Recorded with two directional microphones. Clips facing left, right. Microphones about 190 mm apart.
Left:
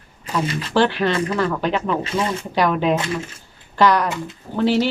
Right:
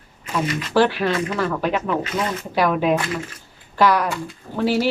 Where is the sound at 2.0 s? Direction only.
30° left (ahead or behind).